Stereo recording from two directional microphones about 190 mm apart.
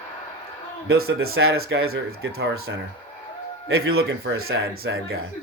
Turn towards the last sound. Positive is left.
turn(degrees=-55)  # may be behind; listen again after turning